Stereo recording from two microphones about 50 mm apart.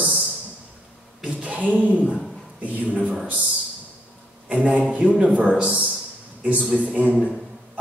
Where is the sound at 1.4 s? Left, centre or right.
Right.